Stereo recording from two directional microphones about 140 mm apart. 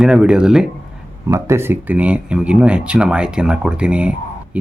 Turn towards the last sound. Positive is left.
turn(degrees=-10)  # may be behind; listen again after turning